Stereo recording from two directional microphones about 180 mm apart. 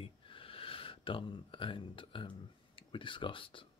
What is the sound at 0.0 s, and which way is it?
Speech, 30° left (ahead or behind).